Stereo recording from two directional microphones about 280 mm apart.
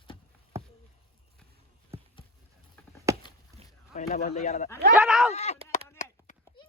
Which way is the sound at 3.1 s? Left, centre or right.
Centre.